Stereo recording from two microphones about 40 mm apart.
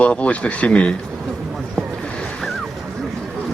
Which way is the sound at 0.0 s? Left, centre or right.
Left.